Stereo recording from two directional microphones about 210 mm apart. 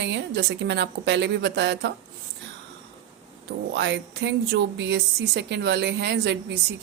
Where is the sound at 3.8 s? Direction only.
55° right (ahead or behind).